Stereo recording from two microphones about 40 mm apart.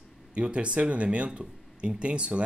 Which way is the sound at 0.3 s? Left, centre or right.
Right.